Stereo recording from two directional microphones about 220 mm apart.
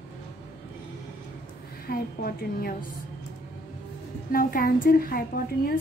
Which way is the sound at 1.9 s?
40° left (ahead or behind).